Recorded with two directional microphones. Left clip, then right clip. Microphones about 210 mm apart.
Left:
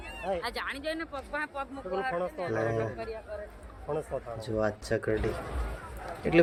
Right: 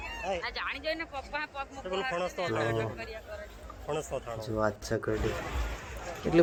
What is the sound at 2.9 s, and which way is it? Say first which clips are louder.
Speech: left 3 dB; 40° left (ahead or behind).